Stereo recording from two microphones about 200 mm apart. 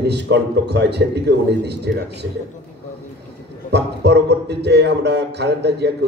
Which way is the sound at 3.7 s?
55° right (ahead or behind).